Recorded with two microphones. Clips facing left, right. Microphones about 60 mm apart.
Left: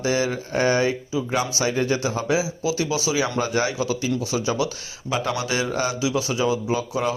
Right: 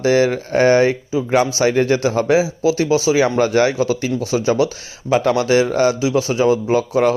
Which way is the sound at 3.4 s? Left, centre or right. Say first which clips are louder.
Right 8 dB; right.